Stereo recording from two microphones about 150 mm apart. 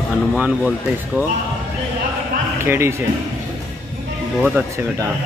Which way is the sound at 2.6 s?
15° right (ahead or behind).